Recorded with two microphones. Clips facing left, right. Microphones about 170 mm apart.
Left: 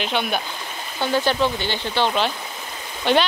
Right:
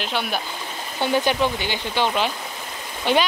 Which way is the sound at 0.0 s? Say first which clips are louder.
Left 2 dB; 5° right (ahead or behind).